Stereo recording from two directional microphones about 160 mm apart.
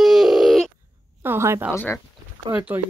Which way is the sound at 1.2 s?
15° right (ahead or behind).